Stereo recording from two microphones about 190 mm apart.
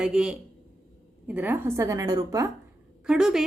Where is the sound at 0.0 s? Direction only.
5° right (ahead or behind); by 2.5 s 20° right (ahead or behind).